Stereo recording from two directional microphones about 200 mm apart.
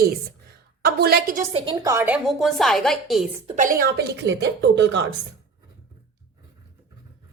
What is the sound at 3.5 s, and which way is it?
A woman's voice, 45° right (ahead or behind).